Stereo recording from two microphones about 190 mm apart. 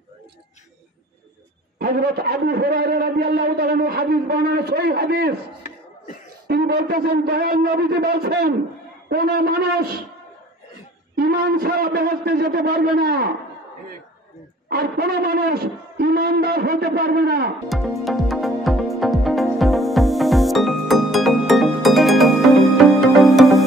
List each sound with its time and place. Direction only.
1.8 s a man's voice: 55° right (ahead or behind)
6.4 s a man's voice: 55° right (ahead or behind)
11.1 s a man's voice: 55° right (ahead or behind)
14.7 s a man's voice: 55° right (ahead or behind)
17.6 s music: centre (ahead or behind)